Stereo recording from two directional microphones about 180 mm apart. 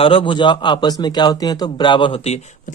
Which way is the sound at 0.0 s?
30° left (ahead or behind).